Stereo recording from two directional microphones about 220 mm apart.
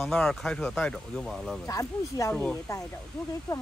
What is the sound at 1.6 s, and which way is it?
Speech, 15° left (ahead or behind).